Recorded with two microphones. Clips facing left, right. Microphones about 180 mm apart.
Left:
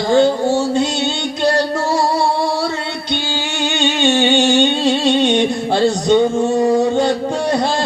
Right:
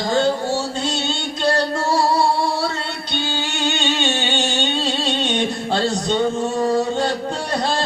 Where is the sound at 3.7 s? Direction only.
15° left (ahead or behind).